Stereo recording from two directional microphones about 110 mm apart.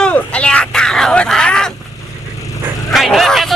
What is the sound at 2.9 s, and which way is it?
Speech, centre (ahead or behind).